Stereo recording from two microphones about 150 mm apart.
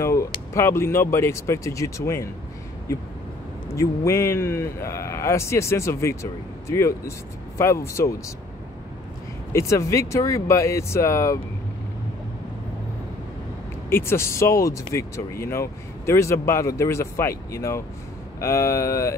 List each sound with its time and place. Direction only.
0.0 s speech: 20° left (ahead or behind)
3.7 s speech: 20° left (ahead or behind)
9.5 s speech: 20° left (ahead or behind)
13.8 s speech: 15° left (ahead or behind)